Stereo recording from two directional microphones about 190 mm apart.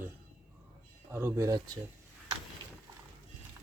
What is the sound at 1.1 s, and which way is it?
Speech, 10° right (ahead or behind).